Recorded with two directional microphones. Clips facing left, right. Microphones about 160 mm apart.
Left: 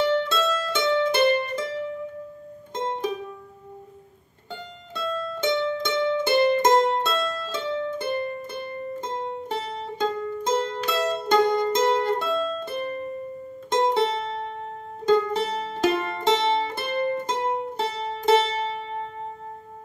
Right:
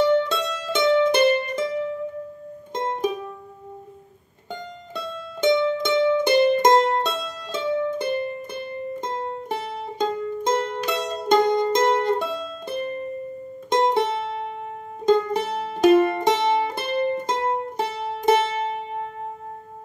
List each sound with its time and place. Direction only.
0.0 s music: 15° right (ahead or behind)
2.7 s music: 15° right (ahead or behind)
4.5 s music: 15° right (ahead or behind)